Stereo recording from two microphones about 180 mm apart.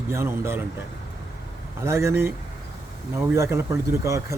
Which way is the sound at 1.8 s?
15° right (ahead or behind).